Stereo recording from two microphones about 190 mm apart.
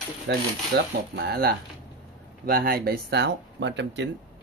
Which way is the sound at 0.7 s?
60° right (ahead or behind).